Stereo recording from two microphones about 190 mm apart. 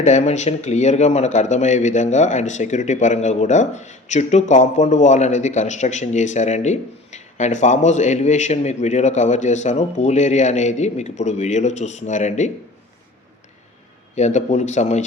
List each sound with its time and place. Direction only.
0.0 s speech: 35° left (ahead or behind)
14.2 s speech: 35° left (ahead or behind)